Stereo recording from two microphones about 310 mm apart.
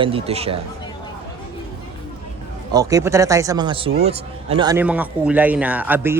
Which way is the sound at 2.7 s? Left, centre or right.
Centre.